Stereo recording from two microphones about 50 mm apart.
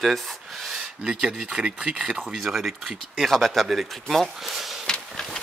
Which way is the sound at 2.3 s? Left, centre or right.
Centre.